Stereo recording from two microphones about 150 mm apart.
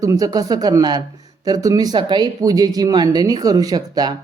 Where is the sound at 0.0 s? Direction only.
25° right (ahead or behind).